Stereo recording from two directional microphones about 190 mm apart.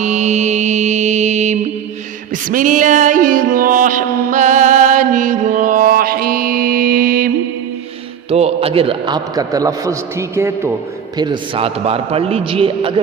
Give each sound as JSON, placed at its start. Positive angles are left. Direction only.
{"t": 0.0, "sound": "mantra", "side_deg": -40}
{"t": 2.3, "sound": "music", "side_deg": -45}
{"t": 8.3, "sound": "a man's voice", "side_deg": -35}
{"t": 11.2, "sound": "a man's voice", "side_deg": -25}